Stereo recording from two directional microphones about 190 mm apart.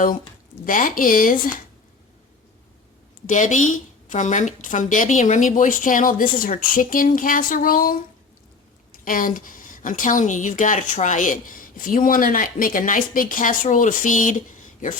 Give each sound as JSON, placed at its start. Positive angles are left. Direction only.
{"t": 0.6, "sound": "a woman's voice", "side_deg": 45}
{"t": 3.2, "sound": "a woman's voice", "side_deg": 40}